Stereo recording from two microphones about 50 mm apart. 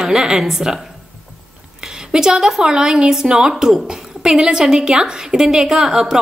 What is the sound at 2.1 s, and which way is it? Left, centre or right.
Speech, centre.